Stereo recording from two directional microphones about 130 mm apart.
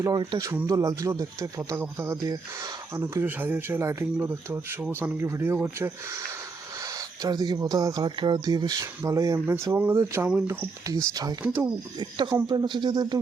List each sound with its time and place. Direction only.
0.0 s speech: 35° right (ahead or behind); by 5.9 s 15° right (ahead or behind)
7.2 s speech: 30° right (ahead or behind)
11.4 s speech: 10° right (ahead or behind)
11.9 s speech: 35° right (ahead or behind)